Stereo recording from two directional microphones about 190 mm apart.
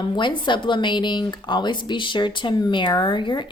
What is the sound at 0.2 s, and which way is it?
A woman's voice, 25° left (ahead or behind).